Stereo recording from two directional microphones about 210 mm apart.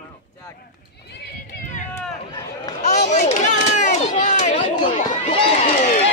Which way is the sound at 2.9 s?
35° left (ahead or behind).